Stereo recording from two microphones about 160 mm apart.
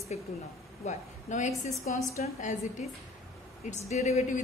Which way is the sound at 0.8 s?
50° left (ahead or behind).